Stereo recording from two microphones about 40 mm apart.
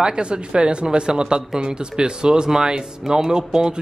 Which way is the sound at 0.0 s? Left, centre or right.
Right.